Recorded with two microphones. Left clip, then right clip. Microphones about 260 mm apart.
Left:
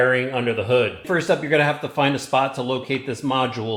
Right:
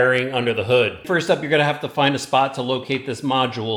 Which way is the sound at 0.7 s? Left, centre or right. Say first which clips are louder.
Right 2 dB; centre.